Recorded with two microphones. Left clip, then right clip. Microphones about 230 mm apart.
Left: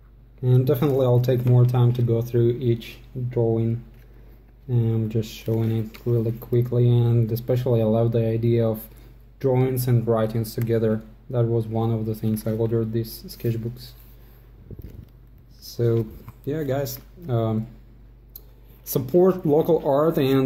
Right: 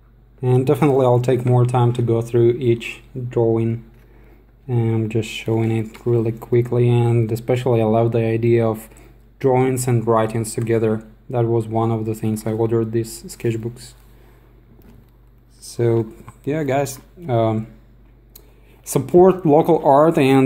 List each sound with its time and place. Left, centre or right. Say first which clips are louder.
0.4 s speech: right 5 dB; right
15.6 s a sound: right 4 dB; right
16.4 s speech: right 6 dB; right
18.9 s speech: right 6 dB; right